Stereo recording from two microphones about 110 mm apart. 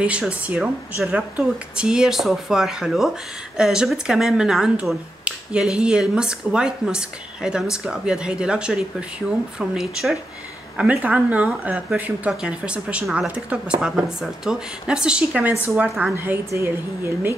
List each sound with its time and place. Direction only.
0.0 s speech: 10° right (ahead or behind)
10.8 s speech: 15° right (ahead or behind)